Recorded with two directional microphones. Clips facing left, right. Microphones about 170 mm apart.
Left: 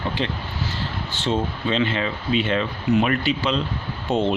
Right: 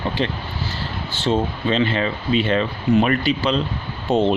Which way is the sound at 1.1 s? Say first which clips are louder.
Right 4 dB; 35° right (ahead or behind).